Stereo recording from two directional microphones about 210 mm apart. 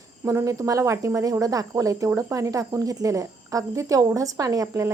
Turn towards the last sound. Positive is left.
turn(degrees=-15)  # may be behind; listen again after turning